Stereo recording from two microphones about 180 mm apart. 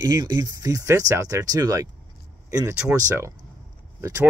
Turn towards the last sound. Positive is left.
turn(degrees=-15)  # may be behind; listen again after turning